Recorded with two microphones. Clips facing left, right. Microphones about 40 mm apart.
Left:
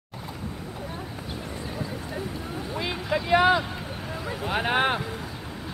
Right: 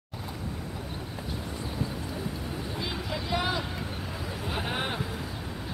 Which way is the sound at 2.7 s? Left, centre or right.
Left.